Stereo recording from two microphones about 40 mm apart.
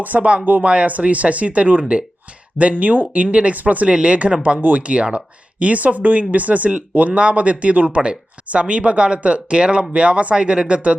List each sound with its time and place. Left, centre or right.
0.0 s speech: right
3.8 s speech: right